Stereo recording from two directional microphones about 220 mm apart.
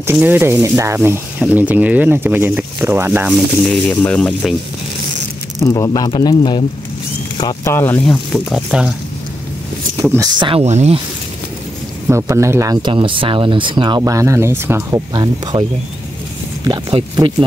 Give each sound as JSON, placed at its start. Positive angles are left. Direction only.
{"t": 0.0, "sound": "speech", "side_deg": -10}
{"t": 3.9, "sound": "speech", "side_deg": 5}
{"t": 5.6, "sound": "speech", "side_deg": 15}
{"t": 10.0, "sound": "speech", "side_deg": -15}
{"t": 12.1, "sound": "speech", "side_deg": -15}
{"t": 16.6, "sound": "speech", "side_deg": -20}